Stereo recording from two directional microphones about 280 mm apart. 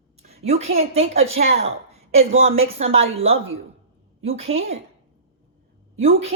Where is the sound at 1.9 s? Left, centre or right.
Right.